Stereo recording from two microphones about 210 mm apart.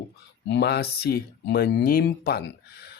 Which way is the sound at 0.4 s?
55° left (ahead or behind).